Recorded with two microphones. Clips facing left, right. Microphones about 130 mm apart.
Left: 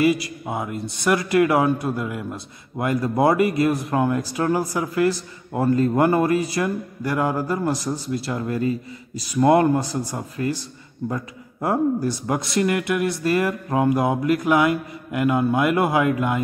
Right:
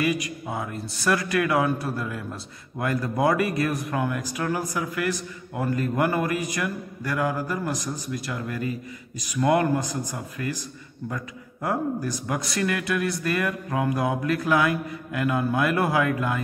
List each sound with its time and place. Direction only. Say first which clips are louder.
0.0 s speech: left 6 dB; 30° left (ahead or behind)